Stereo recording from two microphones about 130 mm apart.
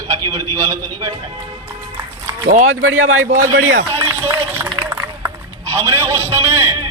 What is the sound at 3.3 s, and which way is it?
Speech, 80° right.